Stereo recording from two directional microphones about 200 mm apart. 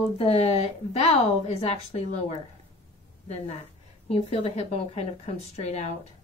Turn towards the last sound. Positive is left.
turn(degrees=35)  # may be behind; listen again after turning